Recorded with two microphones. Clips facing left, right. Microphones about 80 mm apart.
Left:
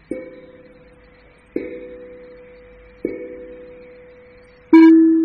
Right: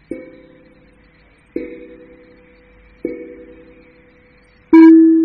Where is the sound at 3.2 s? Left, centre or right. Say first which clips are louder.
Left 1 dB; left.